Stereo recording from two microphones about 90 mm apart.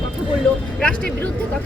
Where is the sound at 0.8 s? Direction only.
10° left (ahead or behind).